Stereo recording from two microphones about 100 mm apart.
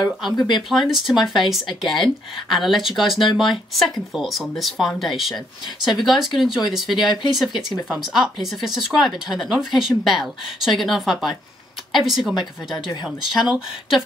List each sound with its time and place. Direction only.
0.4 s speech: 45° left (ahead or behind)
0.7 s speech: centre (ahead or behind)